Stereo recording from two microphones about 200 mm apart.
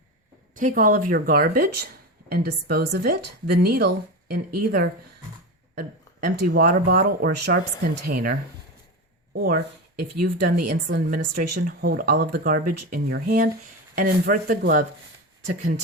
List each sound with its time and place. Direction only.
0.5 s speech: 40° right (ahead or behind)
10.0 s speech: 50° right (ahead or behind)